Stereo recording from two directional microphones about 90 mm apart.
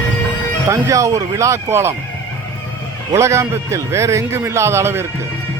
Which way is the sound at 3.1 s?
35° right (ahead or behind).